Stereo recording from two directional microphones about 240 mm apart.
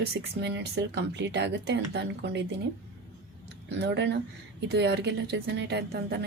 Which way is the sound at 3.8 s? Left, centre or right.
Right.